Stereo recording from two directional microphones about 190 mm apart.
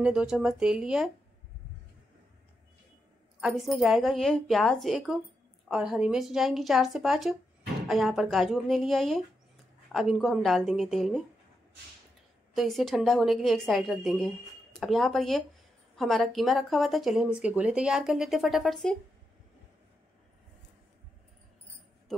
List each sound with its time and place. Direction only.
0.0 s speech: 5° right (ahead or behind)
3.3 s speech: centre (ahead or behind)
12.5 s speech: centre (ahead or behind)